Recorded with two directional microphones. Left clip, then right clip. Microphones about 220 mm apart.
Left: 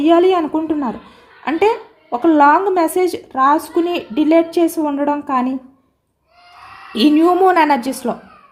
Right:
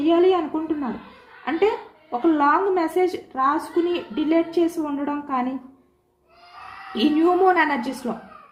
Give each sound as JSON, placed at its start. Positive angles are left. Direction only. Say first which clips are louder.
{"t": 0.0, "sound": "speech", "louder": "left 6 dB", "side_deg": 50}
{"t": 6.9, "sound": "speech", "louder": "left 7 dB", "side_deg": 50}